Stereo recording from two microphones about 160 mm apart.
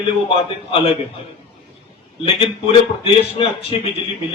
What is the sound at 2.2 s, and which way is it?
A man's voice, 35° left (ahead or behind).